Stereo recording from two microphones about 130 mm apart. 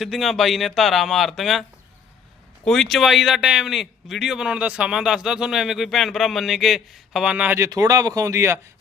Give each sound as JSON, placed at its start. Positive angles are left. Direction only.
{"t": 0.0, "sound": "speech", "side_deg": 0}
{"t": 2.6, "sound": "speech", "side_deg": 5}
{"t": 7.7, "sound": "speech", "side_deg": -25}